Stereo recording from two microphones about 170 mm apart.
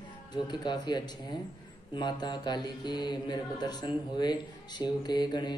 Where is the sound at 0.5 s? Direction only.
25° left (ahead or behind).